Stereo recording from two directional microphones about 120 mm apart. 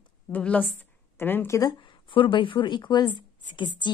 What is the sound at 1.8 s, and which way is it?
Speech, 45° left (ahead or behind).